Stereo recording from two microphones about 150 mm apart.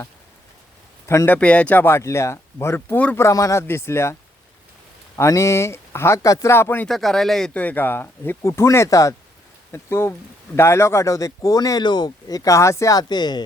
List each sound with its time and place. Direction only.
1.0 s speech: 15° left (ahead or behind)
6.8 s speech: centre (ahead or behind); by 13.4 s 30° left (ahead or behind)